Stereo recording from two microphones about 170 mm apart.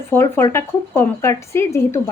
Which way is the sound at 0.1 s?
15° left (ahead or behind).